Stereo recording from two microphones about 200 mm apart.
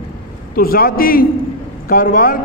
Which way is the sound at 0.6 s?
45° left (ahead or behind).